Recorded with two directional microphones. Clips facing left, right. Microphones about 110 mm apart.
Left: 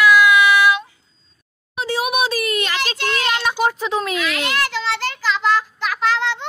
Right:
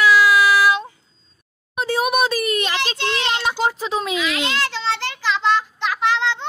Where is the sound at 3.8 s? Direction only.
25° right (ahead or behind).